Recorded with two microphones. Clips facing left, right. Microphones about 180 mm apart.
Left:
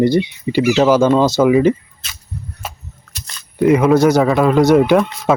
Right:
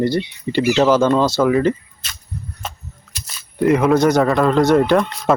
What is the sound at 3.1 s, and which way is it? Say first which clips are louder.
Speech: left 3 dB; 5° right (ahead or behind).